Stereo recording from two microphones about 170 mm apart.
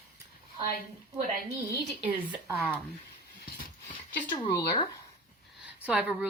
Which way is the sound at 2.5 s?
10° right (ahead or behind).